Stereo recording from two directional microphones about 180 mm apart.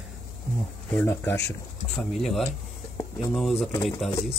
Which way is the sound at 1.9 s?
Centre (ahead or behind).